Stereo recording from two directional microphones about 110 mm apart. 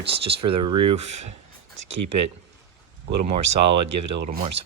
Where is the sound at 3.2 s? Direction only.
60° right (ahead or behind).